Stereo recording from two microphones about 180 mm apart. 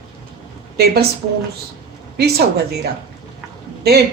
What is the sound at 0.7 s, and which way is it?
Speech, 60° right (ahead or behind).